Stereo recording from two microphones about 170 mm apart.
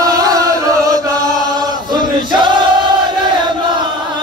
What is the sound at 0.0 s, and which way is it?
Music, 20° right (ahead or behind).